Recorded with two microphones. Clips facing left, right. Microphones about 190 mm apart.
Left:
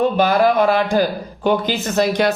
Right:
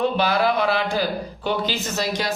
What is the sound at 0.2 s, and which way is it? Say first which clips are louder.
Speech: left 6 dB; 45° left (ahead or behind).